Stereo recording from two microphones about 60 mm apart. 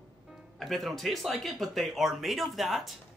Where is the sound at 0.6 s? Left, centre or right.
Centre.